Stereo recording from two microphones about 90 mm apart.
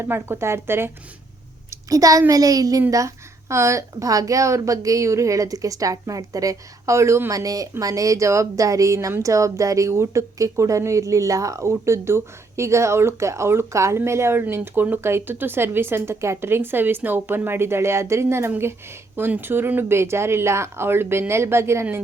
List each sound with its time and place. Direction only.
0.0 s speech: 25° right (ahead or behind)
1.7 s a child's voice: 40° right (ahead or behind)